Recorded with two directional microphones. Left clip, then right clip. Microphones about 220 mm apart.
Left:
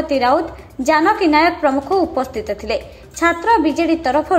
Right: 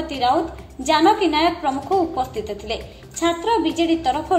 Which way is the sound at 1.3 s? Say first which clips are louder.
Left 6 dB; 25° left (ahead or behind).